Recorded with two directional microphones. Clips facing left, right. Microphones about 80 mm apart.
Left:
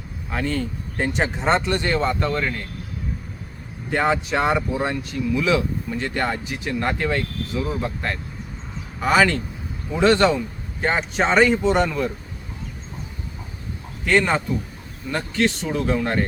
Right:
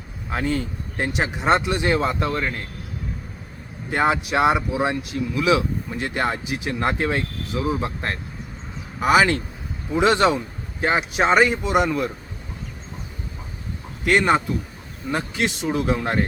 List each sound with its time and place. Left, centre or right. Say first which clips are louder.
0.3 s speech: right 1 dB; centre
3.9 s speech: right 1 dB; centre
14.1 s speech: right 1 dB; centre